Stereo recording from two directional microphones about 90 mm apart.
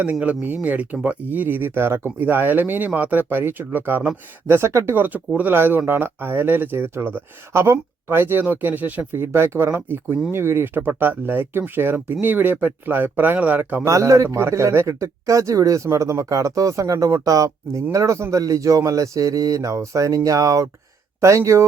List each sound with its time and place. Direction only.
0.0 s speech: 15° right (ahead or behind); by 4.9 s 30° right (ahead or behind)
4.9 s speech: 20° right (ahead or behind)
13.8 s a man's voice: 35° right (ahead or behind)